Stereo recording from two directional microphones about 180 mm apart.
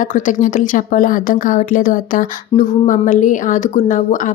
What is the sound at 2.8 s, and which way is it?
Speech, 45° left (ahead or behind).